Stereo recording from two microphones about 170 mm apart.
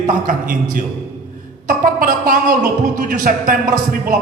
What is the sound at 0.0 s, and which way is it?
A man's voice, 50° right (ahead or behind).